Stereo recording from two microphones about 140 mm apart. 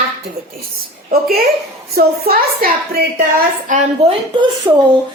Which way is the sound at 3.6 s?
65° right (ahead or behind).